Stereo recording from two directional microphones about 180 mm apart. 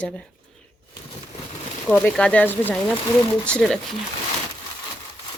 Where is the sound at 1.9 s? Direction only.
5° left (ahead or behind).